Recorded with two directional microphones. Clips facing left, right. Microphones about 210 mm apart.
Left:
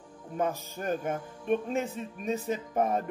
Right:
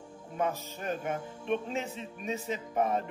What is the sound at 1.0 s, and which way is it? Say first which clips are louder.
Speech: left 2 dB; 45° left (ahead or behind).